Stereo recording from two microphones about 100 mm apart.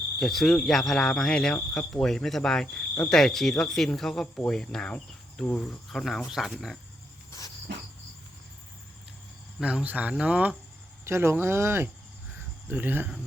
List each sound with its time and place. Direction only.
0.2 s speech: centre (ahead or behind)
4.4 s cricket: 10° left (ahead or behind)
5.9 s speech: centre (ahead or behind)
7.3 s insect: 35° left (ahead or behind)
9.6 s speech: 10° right (ahead or behind)
11.0 s speech: 25° right (ahead or behind)